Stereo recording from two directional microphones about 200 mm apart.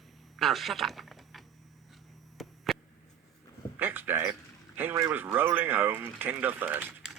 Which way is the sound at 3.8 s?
10° right (ahead or behind).